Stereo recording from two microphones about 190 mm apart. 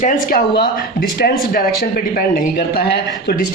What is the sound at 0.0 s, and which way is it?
A man's voice, 45° left (ahead or behind).